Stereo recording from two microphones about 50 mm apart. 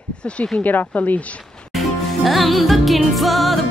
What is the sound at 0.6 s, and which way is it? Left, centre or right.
Speech, left.